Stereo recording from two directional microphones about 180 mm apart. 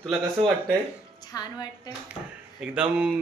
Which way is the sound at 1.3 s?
20° left (ahead or behind).